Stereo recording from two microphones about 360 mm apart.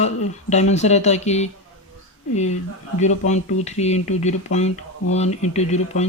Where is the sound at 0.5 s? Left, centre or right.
Centre.